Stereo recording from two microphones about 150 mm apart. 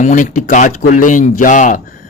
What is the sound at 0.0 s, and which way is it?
Speech, 60° left (ahead or behind).